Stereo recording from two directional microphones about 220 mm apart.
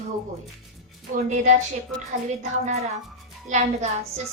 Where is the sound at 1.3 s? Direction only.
30° right (ahead or behind).